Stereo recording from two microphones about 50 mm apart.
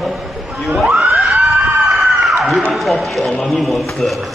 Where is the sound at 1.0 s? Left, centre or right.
Right.